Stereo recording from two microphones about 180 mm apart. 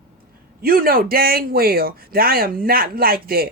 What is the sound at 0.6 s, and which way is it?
A man's voice, 55° right (ahead or behind).